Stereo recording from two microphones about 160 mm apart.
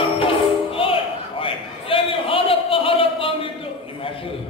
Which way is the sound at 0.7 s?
35° left (ahead or behind).